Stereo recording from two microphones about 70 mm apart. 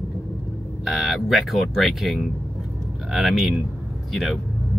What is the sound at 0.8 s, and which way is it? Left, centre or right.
Speech, centre.